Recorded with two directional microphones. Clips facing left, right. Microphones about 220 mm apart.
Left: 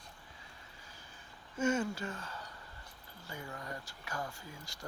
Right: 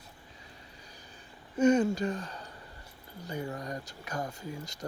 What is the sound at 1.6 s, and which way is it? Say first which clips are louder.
Speech: right 9 dB; 20° right (ahead or behind).